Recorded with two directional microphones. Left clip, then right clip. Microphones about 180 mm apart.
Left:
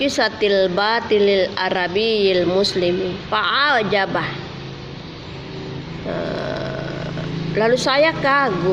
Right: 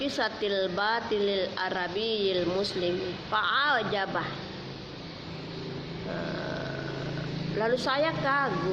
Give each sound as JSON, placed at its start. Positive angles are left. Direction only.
{"t": 0.0, "sound": "a woman's voice", "side_deg": 45}
{"t": 7.6, "sound": "a woman's voice", "side_deg": 45}